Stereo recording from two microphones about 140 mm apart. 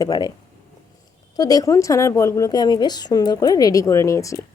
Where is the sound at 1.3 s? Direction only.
25° left (ahead or behind).